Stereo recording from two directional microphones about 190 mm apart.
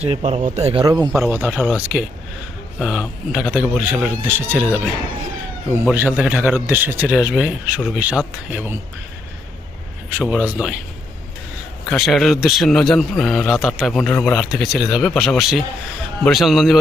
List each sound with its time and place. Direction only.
0.0 s speech: 35° right (ahead or behind)
1.3 s speech: 10° right (ahead or behind)
10.1 s speech: 5° right (ahead or behind)
11.9 s a man's voice: centre (ahead or behind)